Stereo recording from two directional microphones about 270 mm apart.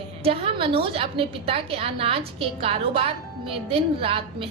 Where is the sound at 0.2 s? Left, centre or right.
Right.